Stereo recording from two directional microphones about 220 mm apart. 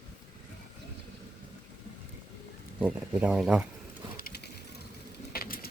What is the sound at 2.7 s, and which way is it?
Speech, 5° right (ahead or behind).